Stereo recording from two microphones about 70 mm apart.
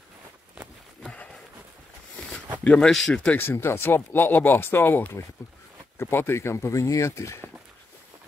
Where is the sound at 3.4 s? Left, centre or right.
Left.